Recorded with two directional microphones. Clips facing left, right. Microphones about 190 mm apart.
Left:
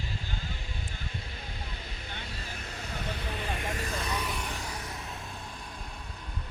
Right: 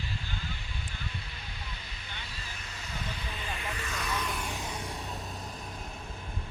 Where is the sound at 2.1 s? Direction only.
55° left (ahead or behind).